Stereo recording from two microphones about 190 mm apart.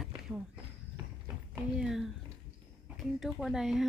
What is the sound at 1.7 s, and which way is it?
Speech, centre (ahead or behind).